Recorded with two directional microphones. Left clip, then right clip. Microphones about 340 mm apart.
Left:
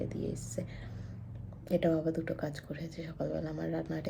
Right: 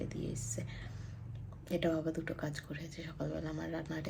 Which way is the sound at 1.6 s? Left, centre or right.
Centre.